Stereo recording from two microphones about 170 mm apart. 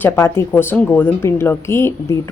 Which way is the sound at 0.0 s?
15° left (ahead or behind).